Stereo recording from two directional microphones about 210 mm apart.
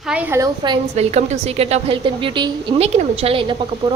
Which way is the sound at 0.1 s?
10° right (ahead or behind).